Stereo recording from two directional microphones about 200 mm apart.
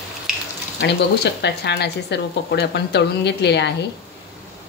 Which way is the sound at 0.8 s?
60° left (ahead or behind).